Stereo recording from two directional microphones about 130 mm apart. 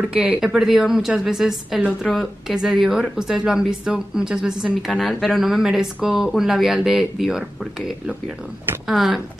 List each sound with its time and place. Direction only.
0.1 s a woman's voice: 10° right (ahead or behind)
8.8 s a woman's voice: centre (ahead or behind)